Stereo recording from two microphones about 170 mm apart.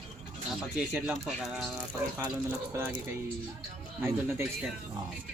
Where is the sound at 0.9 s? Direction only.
5° right (ahead or behind).